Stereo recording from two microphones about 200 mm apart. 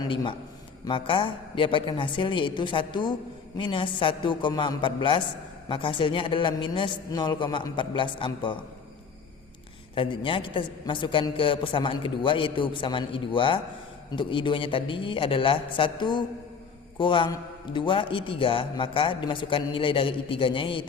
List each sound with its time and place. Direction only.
0.0 s a man's voice: 20° left (ahead or behind)
9.9 s a man's voice: 25° left (ahead or behind)